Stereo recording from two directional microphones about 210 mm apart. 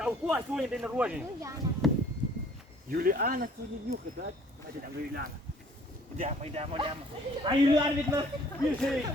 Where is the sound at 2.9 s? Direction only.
45° right (ahead or behind).